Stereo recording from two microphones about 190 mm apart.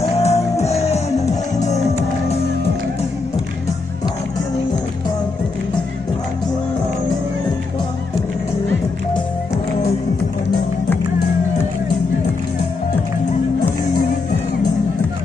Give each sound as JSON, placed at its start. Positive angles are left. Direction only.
{"t": 0.0, "sound": "music", "side_deg": 35}